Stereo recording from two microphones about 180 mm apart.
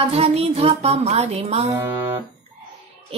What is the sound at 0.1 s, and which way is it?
Speech, 35° right (ahead or behind).